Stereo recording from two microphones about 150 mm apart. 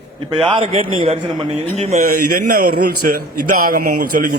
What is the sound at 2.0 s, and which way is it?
A man's voice, 70° right (ahead or behind).